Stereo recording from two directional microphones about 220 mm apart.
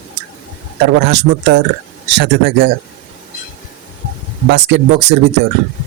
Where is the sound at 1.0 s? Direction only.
50° right (ahead or behind).